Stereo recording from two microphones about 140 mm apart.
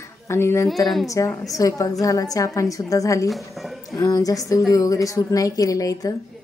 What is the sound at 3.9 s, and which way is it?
A woman's voice, 25° left (ahead or behind).